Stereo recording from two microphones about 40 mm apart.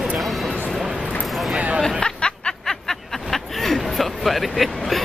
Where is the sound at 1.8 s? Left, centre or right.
Centre.